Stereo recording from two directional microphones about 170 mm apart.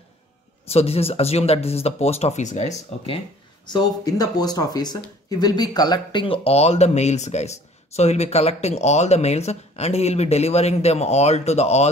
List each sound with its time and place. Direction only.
0.7 s speech: 35° left (ahead or behind)
3.7 s speech: 20° left (ahead or behind); by 11.9 s 40° left (ahead or behind)